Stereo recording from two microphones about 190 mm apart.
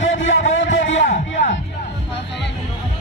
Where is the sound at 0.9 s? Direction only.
40° left (ahead or behind).